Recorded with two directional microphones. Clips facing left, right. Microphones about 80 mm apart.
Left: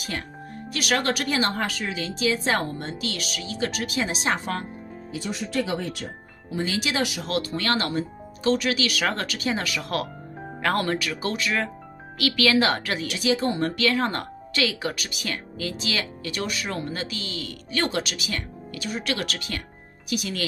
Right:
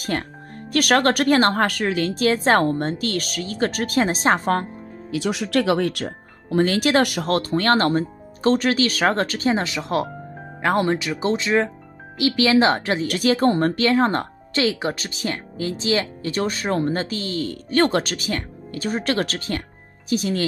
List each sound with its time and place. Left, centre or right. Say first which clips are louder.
0.0 s speech: right 7 dB; right
5.1 s speech: right 6 dB; right
13.0 s speech: right 6 dB; right